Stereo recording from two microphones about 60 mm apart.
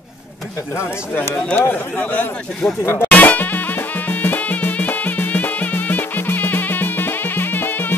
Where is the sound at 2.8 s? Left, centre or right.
Left.